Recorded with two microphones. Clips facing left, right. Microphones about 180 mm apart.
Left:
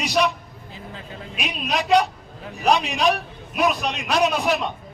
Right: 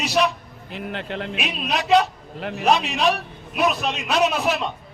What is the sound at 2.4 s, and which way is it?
Speech, 75° right (ahead or behind).